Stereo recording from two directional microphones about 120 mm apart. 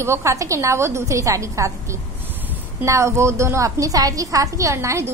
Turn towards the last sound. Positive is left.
turn(degrees=-25)  # may be behind; listen again after turning